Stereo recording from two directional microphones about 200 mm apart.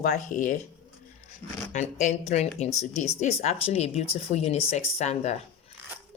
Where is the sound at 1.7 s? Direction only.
35° left (ahead or behind).